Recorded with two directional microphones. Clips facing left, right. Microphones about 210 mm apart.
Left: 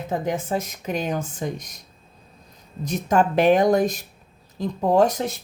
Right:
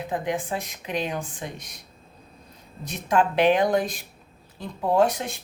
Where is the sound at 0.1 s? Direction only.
40° left (ahead or behind).